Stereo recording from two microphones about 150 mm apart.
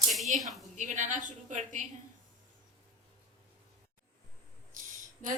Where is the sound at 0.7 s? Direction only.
55° right (ahead or behind).